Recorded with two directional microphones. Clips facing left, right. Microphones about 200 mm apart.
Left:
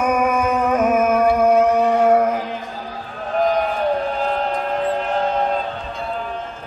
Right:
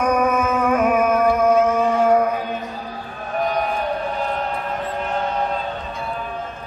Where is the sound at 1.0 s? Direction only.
25° left (ahead or behind).